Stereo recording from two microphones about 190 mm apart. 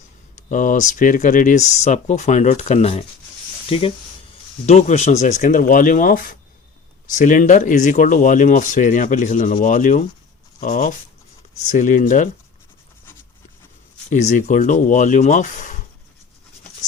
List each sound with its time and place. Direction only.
0.5 s speech: 40° left (ahead or behind)
14.1 s speech: 40° left (ahead or behind)